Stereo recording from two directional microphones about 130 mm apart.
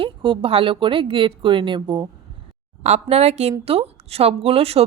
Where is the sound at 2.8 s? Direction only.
60° right (ahead or behind).